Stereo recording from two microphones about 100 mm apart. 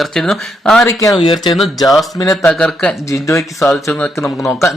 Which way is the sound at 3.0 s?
30° left (ahead or behind).